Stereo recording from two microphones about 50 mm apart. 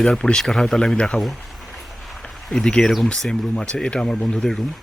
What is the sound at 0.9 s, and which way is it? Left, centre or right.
Speech, left.